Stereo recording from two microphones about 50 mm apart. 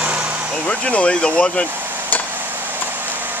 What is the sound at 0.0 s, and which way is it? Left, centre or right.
Vehicle, right.